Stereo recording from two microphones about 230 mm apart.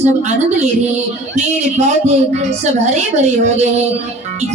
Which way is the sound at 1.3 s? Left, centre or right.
Right.